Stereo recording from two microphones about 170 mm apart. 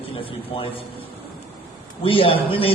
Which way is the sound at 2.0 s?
30° left (ahead or behind).